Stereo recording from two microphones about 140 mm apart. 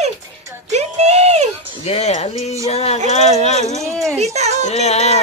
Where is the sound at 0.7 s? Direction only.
50° right (ahead or behind).